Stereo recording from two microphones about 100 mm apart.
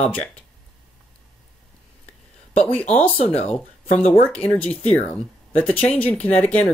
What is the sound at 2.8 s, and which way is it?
Speech, 80° left.